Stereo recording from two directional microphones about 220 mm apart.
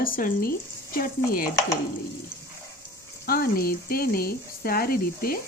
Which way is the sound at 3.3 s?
45° left (ahead or behind).